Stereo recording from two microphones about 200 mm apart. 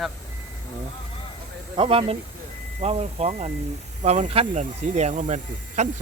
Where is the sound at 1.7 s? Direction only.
25° right (ahead or behind).